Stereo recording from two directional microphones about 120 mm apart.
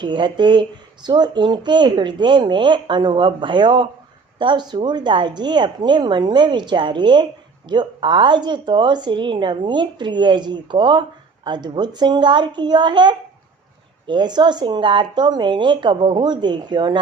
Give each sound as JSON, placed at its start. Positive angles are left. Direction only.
{"t": 0.0, "sound": "speech", "side_deg": -40}